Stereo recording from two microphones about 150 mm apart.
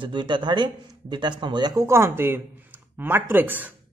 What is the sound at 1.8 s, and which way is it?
Speech, 15° right (ahead or behind).